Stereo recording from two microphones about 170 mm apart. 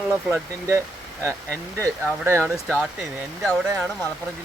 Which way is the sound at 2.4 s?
Centre (ahead or behind).